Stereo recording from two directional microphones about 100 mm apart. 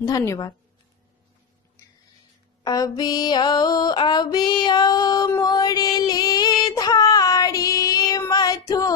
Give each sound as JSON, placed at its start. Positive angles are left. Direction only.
{"t": 0.0, "sound": "a woman's voice", "side_deg": 30}
{"t": 2.6, "sound": "mantra", "side_deg": 35}
{"t": 5.4, "sound": "a sound", "side_deg": 40}